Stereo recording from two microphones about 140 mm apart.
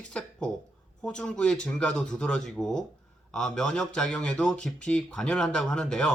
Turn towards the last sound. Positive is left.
turn(degrees=5)  # may be behind; listen again after turning